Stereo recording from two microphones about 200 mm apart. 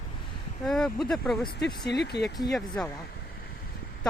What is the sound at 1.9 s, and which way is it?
Speech, 55° left (ahead or behind).